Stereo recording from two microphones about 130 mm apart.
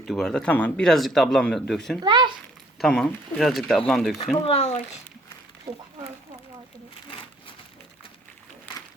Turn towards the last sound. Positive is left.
turn(degrees=40)  # may be behind; listen again after turning